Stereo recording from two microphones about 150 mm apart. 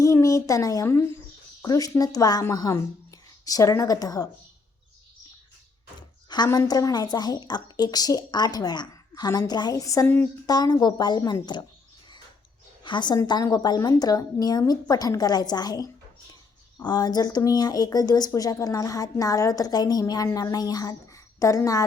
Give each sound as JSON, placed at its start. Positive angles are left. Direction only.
{"t": 0.0, "sound": "speech", "side_deg": 20}
{"t": 6.2, "sound": "speech", "side_deg": 30}
{"t": 12.8, "sound": "speech", "side_deg": 30}